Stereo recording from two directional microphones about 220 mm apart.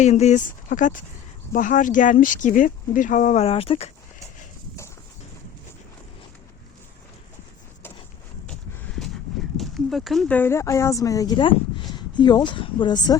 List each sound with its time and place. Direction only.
0.0 s speech: 30° left (ahead or behind)
9.6 s speech: centre (ahead or behind); by 13.1 s 20° left (ahead or behind)